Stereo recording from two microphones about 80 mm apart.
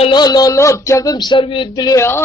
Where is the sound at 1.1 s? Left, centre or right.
Left.